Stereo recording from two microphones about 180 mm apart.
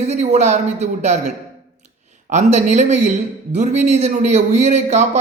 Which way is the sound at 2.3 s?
40° right (ahead or behind).